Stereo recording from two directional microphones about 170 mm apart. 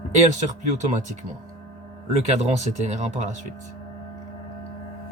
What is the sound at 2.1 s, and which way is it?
Speech, 40° right (ahead or behind).